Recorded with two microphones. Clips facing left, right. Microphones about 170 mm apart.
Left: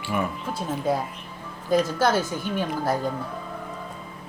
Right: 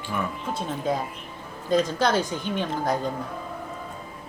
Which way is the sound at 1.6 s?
5° left (ahead or behind).